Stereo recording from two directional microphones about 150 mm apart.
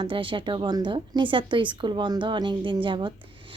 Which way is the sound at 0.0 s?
35° right (ahead or behind).